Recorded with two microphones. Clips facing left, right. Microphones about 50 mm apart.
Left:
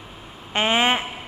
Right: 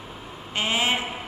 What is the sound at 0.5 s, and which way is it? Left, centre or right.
Speech, left.